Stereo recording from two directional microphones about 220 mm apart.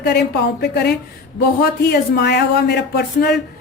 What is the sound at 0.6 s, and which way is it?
Speech, 50° left (ahead or behind).